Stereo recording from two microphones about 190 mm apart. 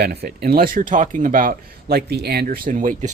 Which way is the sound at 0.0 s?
55° right (ahead or behind).